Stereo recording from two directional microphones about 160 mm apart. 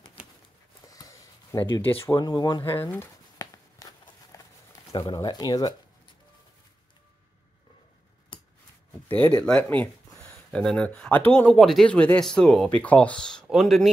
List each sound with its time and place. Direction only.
0.8 s a sound: 20° left (ahead or behind)
4.9 s speech: 25° left (ahead or behind)
8.3 s scissors: 30° left (ahead or behind)
9.4 s speech: 10° left (ahead or behind)